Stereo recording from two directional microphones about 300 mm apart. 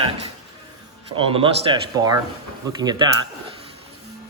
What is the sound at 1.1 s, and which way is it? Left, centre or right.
Speech, centre.